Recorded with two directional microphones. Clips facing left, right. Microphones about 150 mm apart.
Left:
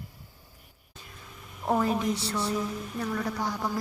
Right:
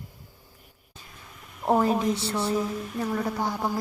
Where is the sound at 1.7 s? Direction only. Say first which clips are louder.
Right 4 dB; 35° right (ahead or behind).